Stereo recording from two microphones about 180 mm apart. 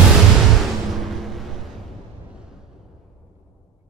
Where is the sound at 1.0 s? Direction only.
Centre (ahead or behind).